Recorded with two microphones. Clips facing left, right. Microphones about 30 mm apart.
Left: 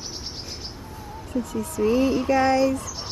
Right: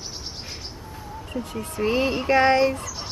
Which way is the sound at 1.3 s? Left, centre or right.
Right.